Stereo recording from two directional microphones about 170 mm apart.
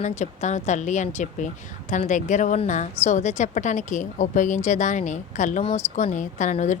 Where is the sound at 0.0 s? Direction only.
45° left (ahead or behind).